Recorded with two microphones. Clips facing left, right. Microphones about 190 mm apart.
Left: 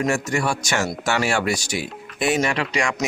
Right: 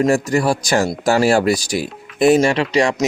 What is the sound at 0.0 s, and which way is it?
Speech, 35° right (ahead or behind).